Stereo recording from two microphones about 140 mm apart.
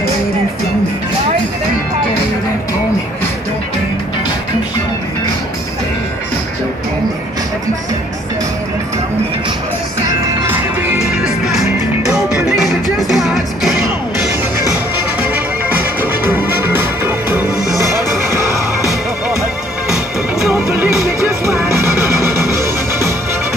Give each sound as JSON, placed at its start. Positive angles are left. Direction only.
{"t": 10.0, "sound": "music", "side_deg": -30}
{"t": 10.5, "sound": "music", "side_deg": -10}
{"t": 13.1, "sound": "music", "side_deg": 0}
{"t": 15.1, "sound": "music", "side_deg": -10}
{"t": 20.7, "sound": "music", "side_deg": -20}